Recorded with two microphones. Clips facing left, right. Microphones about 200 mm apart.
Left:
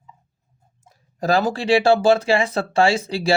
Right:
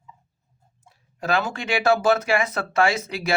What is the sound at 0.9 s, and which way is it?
Speech, 35° left (ahead or behind).